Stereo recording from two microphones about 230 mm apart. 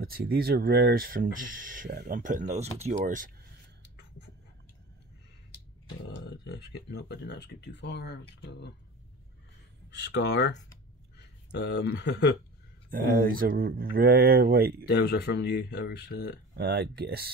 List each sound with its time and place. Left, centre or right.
0.0 s speech: right
3.8 s a sound: left
6.0 s speech: left
9.8 s speech: left
12.9 s speech: right
14.9 s speech: left
16.5 s speech: right